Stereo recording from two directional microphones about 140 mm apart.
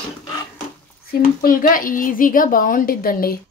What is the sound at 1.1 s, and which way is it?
A child's voice, 90° left.